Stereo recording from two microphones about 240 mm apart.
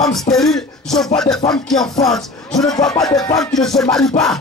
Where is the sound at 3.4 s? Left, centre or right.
Centre.